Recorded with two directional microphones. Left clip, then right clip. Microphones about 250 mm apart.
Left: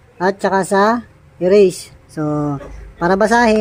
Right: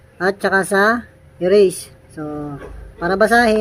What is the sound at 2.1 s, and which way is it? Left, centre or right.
Speech, left.